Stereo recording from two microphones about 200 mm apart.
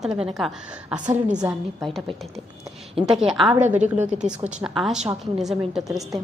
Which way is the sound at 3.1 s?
5° right (ahead or behind).